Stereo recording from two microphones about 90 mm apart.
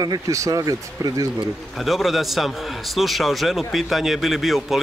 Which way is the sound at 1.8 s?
Centre (ahead or behind).